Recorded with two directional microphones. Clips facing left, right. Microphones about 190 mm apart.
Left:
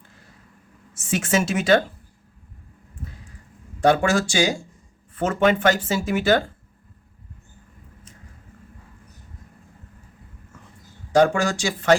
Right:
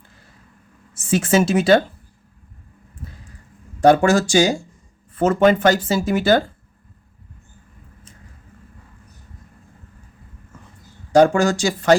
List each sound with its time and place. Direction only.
1.1 s speech: 35° right (ahead or behind)
3.8 s speech: 40° right (ahead or behind)
11.1 s speech: 40° right (ahead or behind)